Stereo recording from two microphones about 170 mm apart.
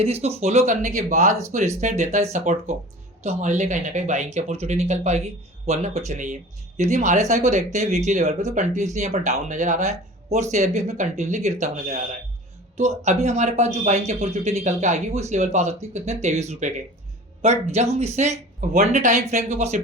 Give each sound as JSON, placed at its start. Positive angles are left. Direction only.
{"t": 0.0, "sound": "speech", "side_deg": -40}